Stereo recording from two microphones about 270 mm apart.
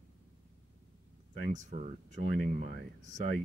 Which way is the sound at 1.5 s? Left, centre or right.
Right.